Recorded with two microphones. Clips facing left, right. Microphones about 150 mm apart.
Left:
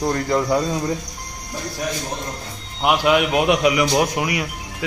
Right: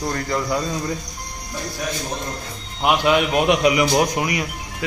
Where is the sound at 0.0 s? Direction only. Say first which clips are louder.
Left 4 dB; 20° left (ahead or behind).